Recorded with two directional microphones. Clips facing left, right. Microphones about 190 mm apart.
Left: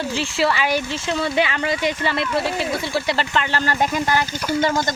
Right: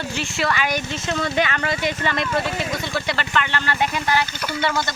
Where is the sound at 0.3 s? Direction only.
25° left (ahead or behind).